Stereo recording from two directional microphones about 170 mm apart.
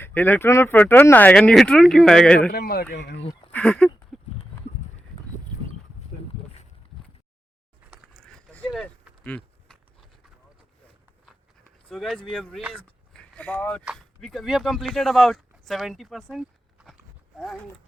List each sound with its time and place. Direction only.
0.0 s speech: 10° left (ahead or behind)
2.5 s speech: 65° left (ahead or behind)
2.9 s speech: 80° left
3.5 s a sound: 5° left (ahead or behind)
8.1 s a sound: 5° left (ahead or behind)
11.9 s speech: centre (ahead or behind)